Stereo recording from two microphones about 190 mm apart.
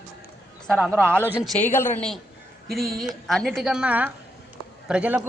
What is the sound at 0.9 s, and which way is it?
A woman's voice, 10° left (ahead or behind).